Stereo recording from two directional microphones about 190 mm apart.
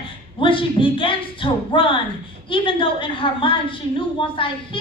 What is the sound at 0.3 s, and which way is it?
A woman's voice, 25° left (ahead or behind).